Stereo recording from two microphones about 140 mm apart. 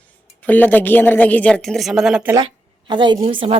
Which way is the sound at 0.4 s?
10° left (ahead or behind).